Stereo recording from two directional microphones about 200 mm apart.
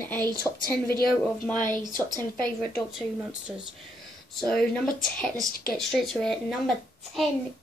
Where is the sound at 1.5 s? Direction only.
40° left (ahead or behind).